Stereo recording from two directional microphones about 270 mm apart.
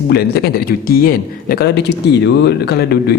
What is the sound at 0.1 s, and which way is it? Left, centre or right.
Speech, left.